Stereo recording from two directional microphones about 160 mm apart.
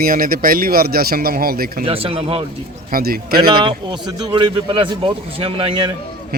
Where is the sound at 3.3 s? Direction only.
30° right (ahead or behind).